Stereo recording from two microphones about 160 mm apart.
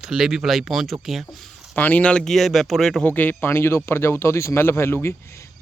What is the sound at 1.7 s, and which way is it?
Speech, 10° left (ahead or behind).